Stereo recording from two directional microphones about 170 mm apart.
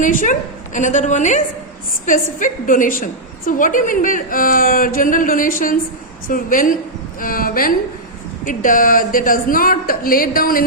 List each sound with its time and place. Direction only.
0.0 s a woman's voice: 50° left (ahead or behind)